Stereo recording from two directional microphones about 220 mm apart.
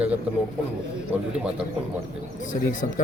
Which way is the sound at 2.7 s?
35° left (ahead or behind).